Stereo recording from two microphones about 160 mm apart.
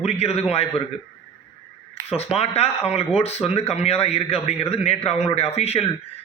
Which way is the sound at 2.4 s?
40° left (ahead or behind).